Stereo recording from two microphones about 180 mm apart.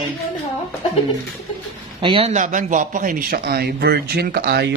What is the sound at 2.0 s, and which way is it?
Speech, 30° right (ahead or behind).